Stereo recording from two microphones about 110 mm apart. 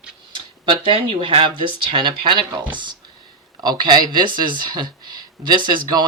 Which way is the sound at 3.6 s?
40° right (ahead or behind).